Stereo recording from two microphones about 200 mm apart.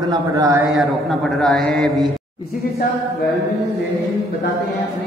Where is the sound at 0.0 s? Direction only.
15° right (ahead or behind).